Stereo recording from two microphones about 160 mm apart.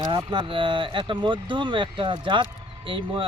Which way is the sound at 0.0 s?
25° right (ahead or behind).